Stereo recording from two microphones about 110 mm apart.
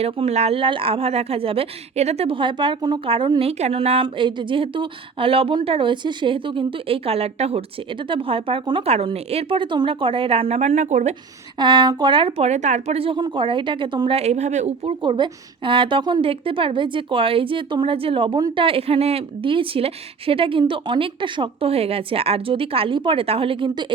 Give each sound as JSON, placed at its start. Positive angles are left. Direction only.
{"t": 0.0, "sound": "a woman's voice", "side_deg": -70}
{"t": 3.6, "sound": "a woman's voice", "side_deg": -65}
{"t": 8.1, "sound": "a woman's voice", "side_deg": -55}
{"t": 8.9, "sound": "a woman's voice", "side_deg": -65}
{"t": 11.6, "sound": "a woman's voice", "side_deg": -40}
{"t": 12.4, "sound": "speech", "side_deg": -90}
{"t": 13.1, "sound": "speech", "side_deg": -35}
{"t": 13.4, "sound": "a woman's voice", "side_deg": -50}
{"t": 14.2, "sound": "speech", "side_deg": -85}
{"t": 15.0, "sound": "a woman's voice", "side_deg": -45}